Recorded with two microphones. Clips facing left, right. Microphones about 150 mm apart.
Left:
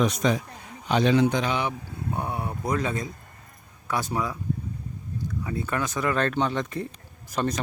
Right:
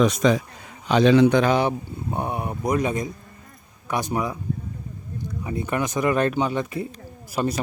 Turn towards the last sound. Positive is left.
turn(degrees=-10)  # may be behind; listen again after turning